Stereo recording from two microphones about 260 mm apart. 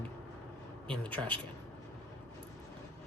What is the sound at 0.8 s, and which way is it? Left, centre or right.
Speech, centre.